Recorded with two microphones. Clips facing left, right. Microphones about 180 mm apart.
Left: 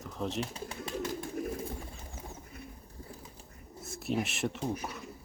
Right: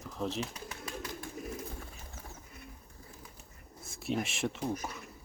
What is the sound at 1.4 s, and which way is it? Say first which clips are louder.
Bird: left 7 dB; 60° left (ahead or behind).